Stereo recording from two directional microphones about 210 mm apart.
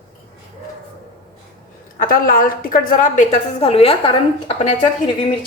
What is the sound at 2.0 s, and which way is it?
A woman's voice, 45° left (ahead or behind).